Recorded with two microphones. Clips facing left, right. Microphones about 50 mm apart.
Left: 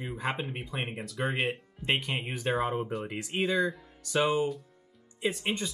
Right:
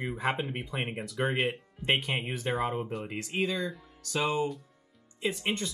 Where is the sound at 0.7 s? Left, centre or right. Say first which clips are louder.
Right 1 dB; right.